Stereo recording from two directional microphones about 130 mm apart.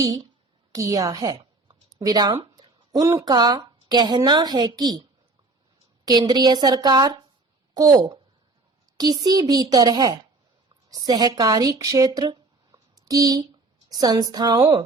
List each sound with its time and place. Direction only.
0.7 s a woman's voice: 25° right (ahead or behind)
6.1 s a woman's voice: 30° right (ahead or behind)